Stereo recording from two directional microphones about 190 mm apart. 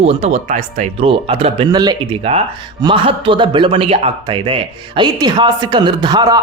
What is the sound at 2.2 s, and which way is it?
Speech, 30° right (ahead or behind).